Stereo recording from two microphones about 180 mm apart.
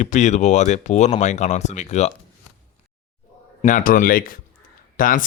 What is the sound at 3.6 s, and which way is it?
Speech, 50° left (ahead or behind).